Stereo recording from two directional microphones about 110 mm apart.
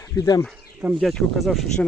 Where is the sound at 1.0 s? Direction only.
Centre (ahead or behind).